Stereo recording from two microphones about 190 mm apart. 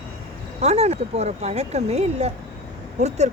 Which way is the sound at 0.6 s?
35° right (ahead or behind).